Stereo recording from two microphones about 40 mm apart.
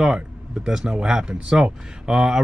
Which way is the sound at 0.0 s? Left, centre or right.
Centre.